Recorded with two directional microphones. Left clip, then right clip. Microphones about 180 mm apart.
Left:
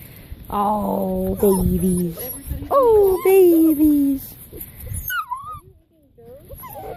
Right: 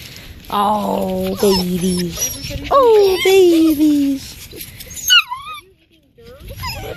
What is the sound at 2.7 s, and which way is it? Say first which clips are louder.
Speech: right 4 dB; 10° left (ahead or behind).